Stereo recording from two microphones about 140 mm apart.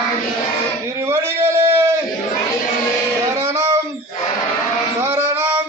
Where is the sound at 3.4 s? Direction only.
20° right (ahead or behind).